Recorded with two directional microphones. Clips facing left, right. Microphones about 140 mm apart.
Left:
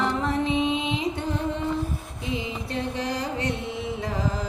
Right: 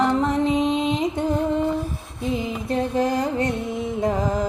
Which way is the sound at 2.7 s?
45° right (ahead or behind).